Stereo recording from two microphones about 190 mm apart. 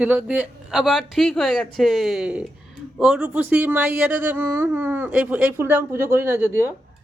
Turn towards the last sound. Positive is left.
turn(degrees=-10)  # may be behind; listen again after turning